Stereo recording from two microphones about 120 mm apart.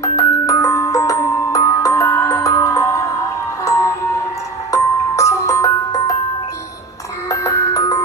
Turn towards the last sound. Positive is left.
turn(degrees=30)  # may be behind; listen again after turning